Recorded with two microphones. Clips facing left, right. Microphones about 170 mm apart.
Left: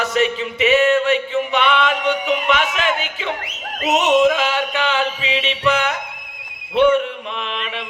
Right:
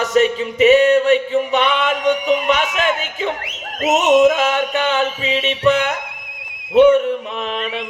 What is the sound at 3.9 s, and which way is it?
Music, 40° right (ahead or behind).